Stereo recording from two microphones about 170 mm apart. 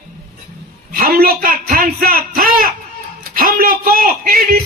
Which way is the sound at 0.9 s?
60° right (ahead or behind).